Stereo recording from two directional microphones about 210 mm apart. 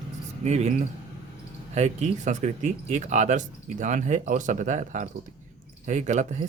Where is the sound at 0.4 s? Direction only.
30° right (ahead or behind).